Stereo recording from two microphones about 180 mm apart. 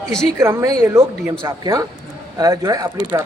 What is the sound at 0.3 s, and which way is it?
Speech, 15° right (ahead or behind).